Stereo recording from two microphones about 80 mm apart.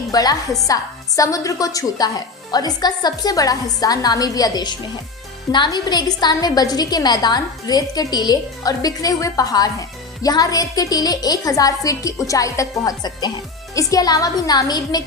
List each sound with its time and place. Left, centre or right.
0.1 s a woman's voice: left
13.0 s a woman's voice: left